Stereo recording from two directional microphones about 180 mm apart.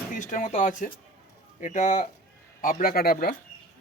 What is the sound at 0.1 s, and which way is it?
Speech, 45° left (ahead or behind).